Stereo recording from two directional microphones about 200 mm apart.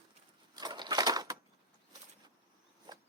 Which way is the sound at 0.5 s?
20° right (ahead or behind).